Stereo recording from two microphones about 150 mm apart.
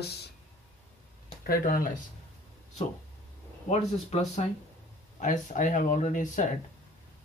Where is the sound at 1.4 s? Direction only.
75° left (ahead or behind).